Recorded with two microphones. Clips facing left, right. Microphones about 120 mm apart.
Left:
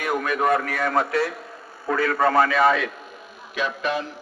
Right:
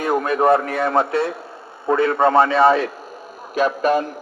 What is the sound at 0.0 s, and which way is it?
Speech, 30° right (ahead or behind).